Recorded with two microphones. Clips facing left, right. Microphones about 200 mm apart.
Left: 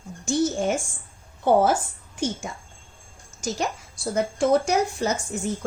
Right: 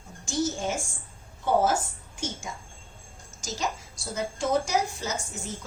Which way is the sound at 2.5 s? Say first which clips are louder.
Left 2 dB; 60° left (ahead or behind).